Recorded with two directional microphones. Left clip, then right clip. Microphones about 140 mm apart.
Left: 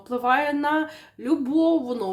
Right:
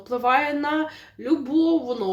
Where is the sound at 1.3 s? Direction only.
35° left (ahead or behind).